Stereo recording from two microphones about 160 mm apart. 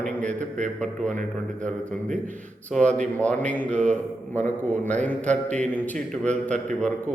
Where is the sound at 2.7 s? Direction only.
5° left (ahead or behind).